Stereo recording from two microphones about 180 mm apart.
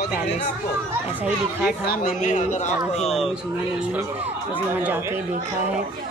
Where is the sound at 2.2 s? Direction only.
40° left (ahead or behind).